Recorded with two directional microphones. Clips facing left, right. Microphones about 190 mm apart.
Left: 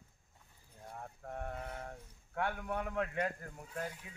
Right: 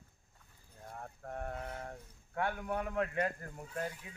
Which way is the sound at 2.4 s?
5° right (ahead or behind).